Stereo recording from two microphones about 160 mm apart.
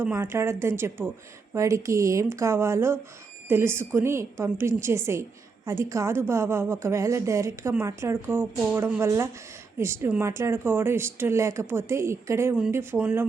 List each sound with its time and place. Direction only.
0.0 s a woman's voice: 15° right (ahead or behind)